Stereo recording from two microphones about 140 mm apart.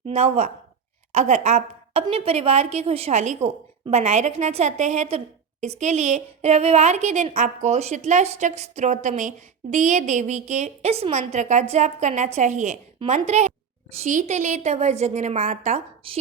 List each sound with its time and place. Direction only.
0.1 s a woman's voice: 50° right (ahead or behind)
16.0 s a woman's voice: 40° right (ahead or behind)